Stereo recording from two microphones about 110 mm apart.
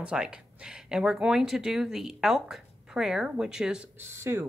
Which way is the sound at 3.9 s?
20° right (ahead or behind).